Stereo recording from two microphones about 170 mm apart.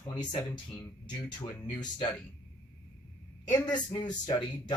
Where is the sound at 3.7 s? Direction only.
25° left (ahead or behind).